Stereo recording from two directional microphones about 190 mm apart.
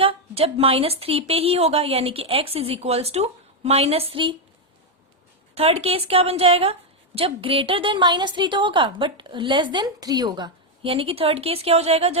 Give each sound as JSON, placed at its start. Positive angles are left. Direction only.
{"t": 0.0, "sound": "a woman's voice", "side_deg": -30}
{"t": 5.5, "sound": "a woman's voice", "side_deg": -30}